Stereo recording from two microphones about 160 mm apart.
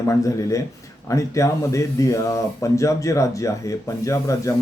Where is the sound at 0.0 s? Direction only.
20° left (ahead or behind).